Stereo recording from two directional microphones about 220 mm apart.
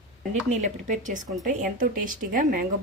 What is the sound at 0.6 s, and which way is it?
A woman's voice, 35° right (ahead or behind).